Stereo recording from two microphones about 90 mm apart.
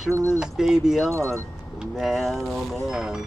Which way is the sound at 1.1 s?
30° right (ahead or behind).